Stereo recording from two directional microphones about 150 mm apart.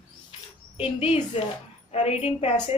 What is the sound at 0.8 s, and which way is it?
A woman's voice, 40° left (ahead or behind).